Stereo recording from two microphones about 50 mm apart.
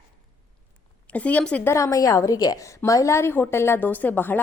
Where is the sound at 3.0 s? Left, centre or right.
Left.